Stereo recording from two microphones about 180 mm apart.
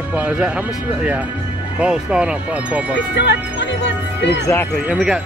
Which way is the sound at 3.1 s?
80° left.